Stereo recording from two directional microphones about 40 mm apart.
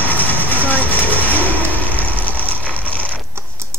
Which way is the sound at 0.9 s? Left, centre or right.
Left.